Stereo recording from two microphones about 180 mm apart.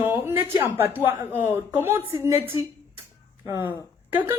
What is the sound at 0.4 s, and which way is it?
A woman's voice, 10° right (ahead or behind).